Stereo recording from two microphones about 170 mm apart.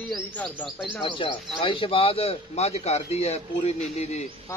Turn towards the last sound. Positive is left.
turn(degrees=40)  # may be behind; listen again after turning